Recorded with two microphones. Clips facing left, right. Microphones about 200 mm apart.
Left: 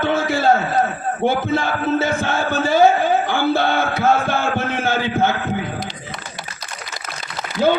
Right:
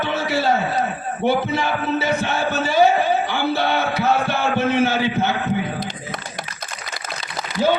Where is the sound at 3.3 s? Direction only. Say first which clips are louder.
Left 3 dB; 50° left (ahead or behind).